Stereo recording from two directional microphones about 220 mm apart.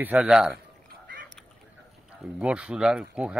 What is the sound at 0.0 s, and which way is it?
Speech, 5° right (ahead or behind).